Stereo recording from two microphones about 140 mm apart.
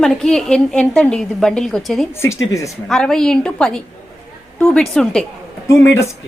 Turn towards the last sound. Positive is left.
turn(degrees=20)  # may be behind; listen again after turning